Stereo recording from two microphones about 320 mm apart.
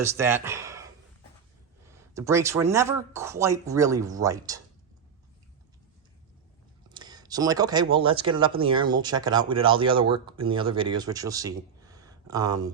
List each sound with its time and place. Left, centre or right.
0.0 s speech: centre
1.9 s speech: centre
6.9 s speech: centre